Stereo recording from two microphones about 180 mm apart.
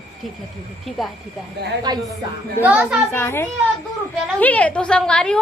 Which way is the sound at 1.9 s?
20° right (ahead or behind).